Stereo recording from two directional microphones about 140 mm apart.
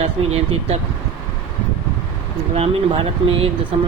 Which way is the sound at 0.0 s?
50° right (ahead or behind).